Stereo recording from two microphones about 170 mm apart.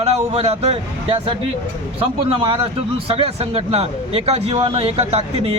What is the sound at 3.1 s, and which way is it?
Speech, 35° right (ahead or behind).